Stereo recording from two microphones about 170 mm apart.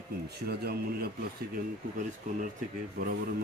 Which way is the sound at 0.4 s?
65° right (ahead or behind).